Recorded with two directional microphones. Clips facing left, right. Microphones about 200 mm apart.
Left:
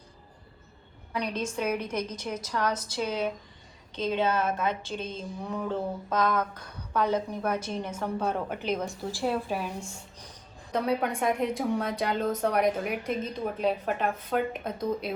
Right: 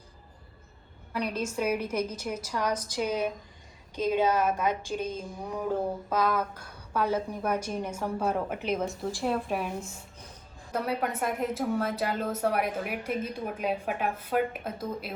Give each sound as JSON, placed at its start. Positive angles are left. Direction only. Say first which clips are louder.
{"t": 1.1, "sound": "speech", "louder": "even", "side_deg": -5}
{"t": 9.8, "sound": "speech", "louder": "left 1 dB", "side_deg": 30}
{"t": 10.7, "sound": "a woman's voice", "louder": "left 3 dB", "side_deg": -5}